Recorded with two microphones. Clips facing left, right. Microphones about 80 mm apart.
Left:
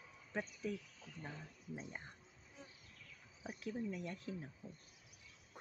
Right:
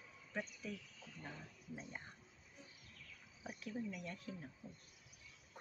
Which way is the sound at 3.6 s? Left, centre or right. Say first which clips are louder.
Left 3 dB; left.